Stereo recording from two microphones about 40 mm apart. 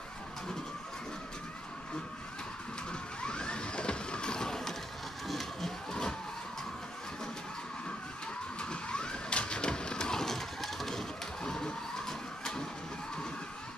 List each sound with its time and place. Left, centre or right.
2.9 s a sound: left
5.3 s vehicle: centre
8.5 s vehicle: left; by 11.1 s centre
11.4 s printer: centre